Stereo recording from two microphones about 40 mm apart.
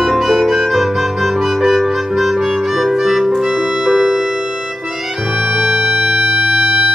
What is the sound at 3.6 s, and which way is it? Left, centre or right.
Music, centre.